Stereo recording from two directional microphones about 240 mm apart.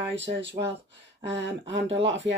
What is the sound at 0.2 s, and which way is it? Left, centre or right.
Speech, right.